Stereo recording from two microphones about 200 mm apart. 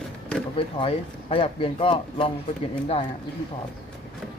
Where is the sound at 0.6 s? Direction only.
25° left (ahead or behind).